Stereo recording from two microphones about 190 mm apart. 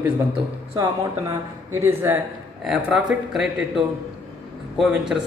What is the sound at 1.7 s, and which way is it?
Speech, 15° right (ahead or behind).